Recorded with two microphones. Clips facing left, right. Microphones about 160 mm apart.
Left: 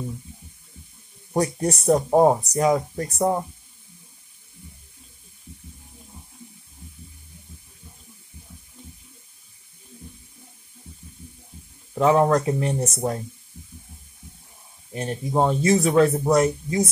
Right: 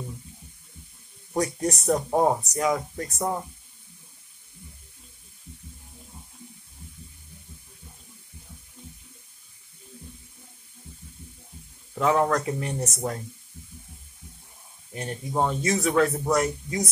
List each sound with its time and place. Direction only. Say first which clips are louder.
1.3 s speech: left 3 dB; 30° left (ahead or behind)
11.9 s speech: left 5 dB; 25° left (ahead or behind)
15.0 s speech: left 4 dB; 30° left (ahead or behind)